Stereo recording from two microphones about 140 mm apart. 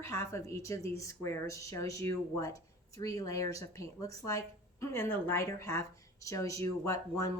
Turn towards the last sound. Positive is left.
turn(degrees=20)  # may be behind; listen again after turning